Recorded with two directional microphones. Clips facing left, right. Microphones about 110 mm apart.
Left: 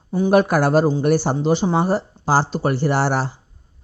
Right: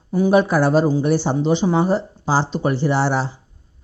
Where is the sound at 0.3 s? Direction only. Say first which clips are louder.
Even; 50° left (ahead or behind).